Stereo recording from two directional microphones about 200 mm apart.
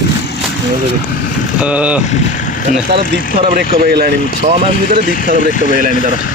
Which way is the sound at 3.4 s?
45° right (ahead or behind).